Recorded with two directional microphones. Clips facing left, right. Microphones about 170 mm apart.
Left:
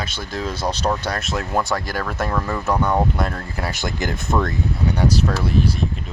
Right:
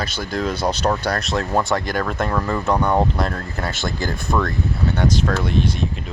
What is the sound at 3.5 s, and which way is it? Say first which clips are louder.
Speech: left 1 dB; 15° left (ahead or behind).